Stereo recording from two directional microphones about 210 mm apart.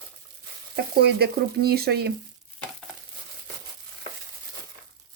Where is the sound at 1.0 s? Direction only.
50° right (ahead or behind).